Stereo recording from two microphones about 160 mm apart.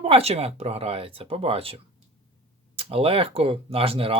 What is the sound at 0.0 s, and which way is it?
Speech, 40° right (ahead or behind).